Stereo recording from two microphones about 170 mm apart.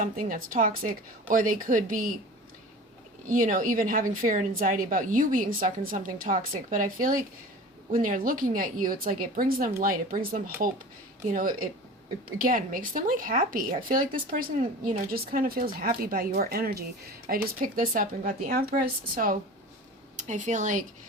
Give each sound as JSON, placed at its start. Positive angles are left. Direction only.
{"t": 0.0, "sound": "a woman's voice", "side_deg": -55}
{"t": 3.2, "sound": "a woman's voice", "side_deg": -55}